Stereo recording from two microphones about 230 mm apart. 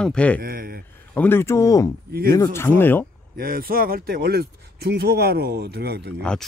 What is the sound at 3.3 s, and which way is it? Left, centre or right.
Speech, right.